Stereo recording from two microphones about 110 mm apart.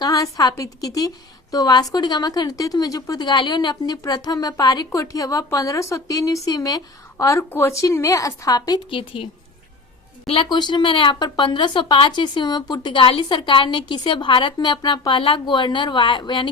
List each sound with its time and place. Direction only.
0.0 s a woman's voice: 35° left (ahead or behind)
8.9 s speech: 55° left (ahead or behind)
10.5 s speech: 40° left (ahead or behind)